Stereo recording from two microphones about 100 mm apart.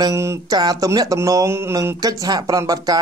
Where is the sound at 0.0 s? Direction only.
30° right (ahead or behind).